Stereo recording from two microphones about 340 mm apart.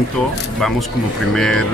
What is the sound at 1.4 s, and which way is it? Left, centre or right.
Speech, centre.